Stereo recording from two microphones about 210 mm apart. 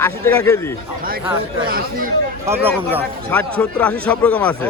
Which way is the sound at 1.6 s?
45° right (ahead or behind).